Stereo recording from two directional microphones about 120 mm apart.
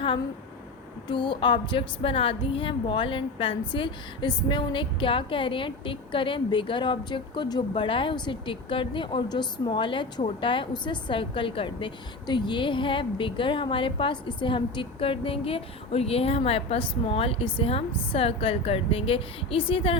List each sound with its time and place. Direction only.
1.0 s a woman's voice: 40° left (ahead or behind)